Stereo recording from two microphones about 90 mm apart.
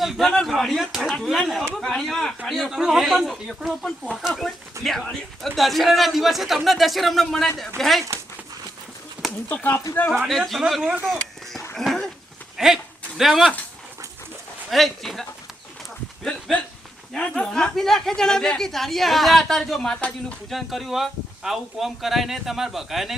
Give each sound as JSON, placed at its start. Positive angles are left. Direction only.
{"t": 0.0, "sound": "speech", "side_deg": 0}
{"t": 9.6, "sound": "speech", "side_deg": 20}
{"t": 10.2, "sound": "speech", "side_deg": 0}
{"t": 11.8, "sound": "dog", "side_deg": 5}
{"t": 12.5, "sound": "a sound", "side_deg": -5}
{"t": 14.7, "sound": "speech", "side_deg": 0}
{"t": 16.2, "sound": "a sound", "side_deg": 10}
{"t": 17.2, "sound": "speech", "side_deg": 10}